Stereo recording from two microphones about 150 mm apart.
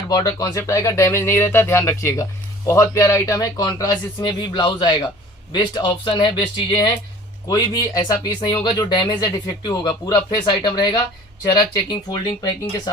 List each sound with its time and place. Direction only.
0.1 s speech: 25° left (ahead or behind)